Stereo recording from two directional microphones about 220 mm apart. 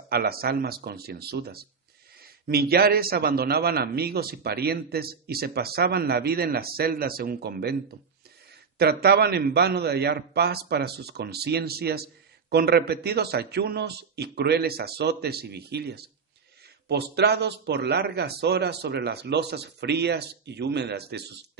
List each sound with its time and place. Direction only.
0.1 s a man's voice: 45° right (ahead or behind)
8.7 s a man's voice: 45° right (ahead or behind)